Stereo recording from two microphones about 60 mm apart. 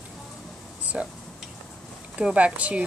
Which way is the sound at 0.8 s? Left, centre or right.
Right.